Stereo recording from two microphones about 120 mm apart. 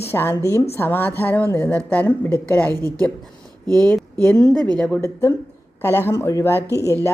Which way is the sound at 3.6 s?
30° right (ahead or behind).